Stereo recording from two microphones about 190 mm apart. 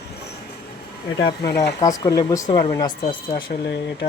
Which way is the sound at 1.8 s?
20° left (ahead or behind).